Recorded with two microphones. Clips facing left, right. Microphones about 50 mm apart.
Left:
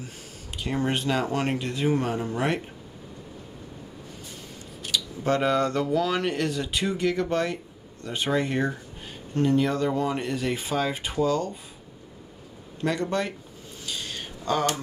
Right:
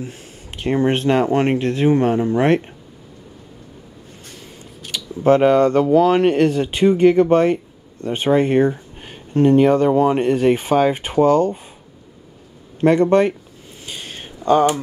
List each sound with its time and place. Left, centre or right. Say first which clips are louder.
0.8 s speech: right 9 dB; right
4.9 s speech: right 10 dB; right
12.8 s speech: right 13 dB; right
13.8 s a sound: right 2 dB; right